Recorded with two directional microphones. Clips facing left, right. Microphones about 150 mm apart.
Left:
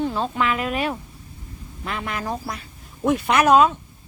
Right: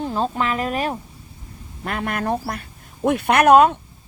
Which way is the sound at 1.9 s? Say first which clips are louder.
Right 4 dB; 55° right (ahead or behind).